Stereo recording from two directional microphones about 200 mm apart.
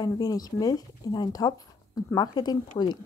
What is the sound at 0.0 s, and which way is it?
Speech, 20° left (ahead or behind).